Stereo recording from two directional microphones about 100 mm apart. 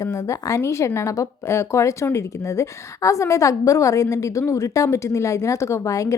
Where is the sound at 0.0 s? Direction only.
35° left (ahead or behind).